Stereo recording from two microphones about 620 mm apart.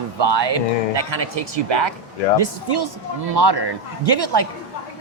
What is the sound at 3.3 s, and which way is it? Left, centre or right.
Speech, right.